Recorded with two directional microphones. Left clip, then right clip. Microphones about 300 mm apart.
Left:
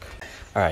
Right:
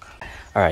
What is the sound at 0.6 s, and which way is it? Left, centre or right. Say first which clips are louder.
Speech: right 4 dB; centre.